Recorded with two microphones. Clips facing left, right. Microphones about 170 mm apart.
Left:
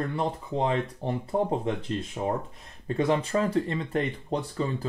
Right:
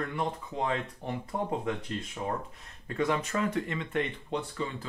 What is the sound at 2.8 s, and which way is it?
Speech, 30° left (ahead or behind).